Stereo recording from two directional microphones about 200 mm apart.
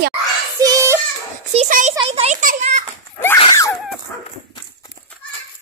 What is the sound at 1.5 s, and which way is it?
A child's voice, 35° right (ahead or behind).